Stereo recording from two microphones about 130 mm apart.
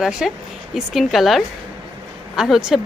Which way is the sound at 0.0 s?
5° right (ahead or behind).